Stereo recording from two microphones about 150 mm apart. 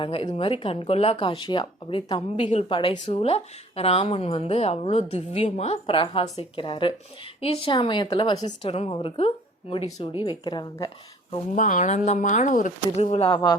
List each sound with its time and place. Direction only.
0.0 s speech: 35° left (ahead or behind)
2.4 s a woman's voice: 50° left (ahead or behind)
2.6 s speech: 35° left (ahead or behind)
11.5 s speech: 60° left (ahead or behind); by 13.6 s 30° left (ahead or behind)